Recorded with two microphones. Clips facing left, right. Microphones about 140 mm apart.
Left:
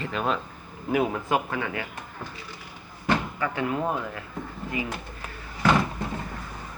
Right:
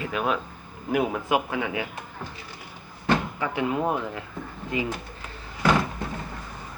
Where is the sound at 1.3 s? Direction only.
15° right (ahead or behind).